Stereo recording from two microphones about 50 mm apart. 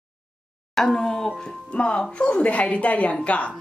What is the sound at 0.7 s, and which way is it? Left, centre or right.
Speech, centre.